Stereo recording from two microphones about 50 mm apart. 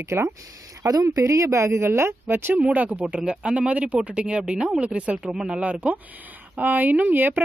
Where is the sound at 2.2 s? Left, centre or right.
Right.